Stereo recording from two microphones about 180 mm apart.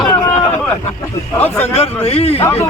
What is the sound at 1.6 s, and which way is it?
Speech, 35° left (ahead or behind).